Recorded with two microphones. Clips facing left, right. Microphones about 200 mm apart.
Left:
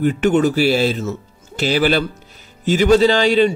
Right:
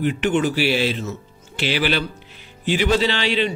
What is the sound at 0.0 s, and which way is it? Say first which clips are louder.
A man's voice: left 5 dB; 45° left (ahead or behind).